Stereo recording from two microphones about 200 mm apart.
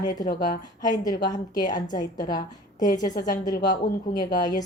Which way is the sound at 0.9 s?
20° left (ahead or behind).